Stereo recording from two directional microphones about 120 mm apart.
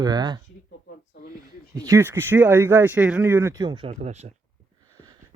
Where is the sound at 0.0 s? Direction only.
35° right (ahead or behind).